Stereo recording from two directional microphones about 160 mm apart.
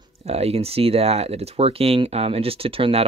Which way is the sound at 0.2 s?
40° right (ahead or behind).